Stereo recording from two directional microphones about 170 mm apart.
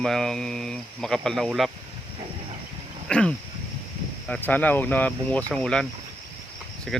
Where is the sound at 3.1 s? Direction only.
5° left (ahead or behind).